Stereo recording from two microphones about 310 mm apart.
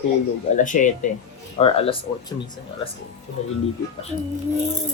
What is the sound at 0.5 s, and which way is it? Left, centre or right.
A woman's voice, left.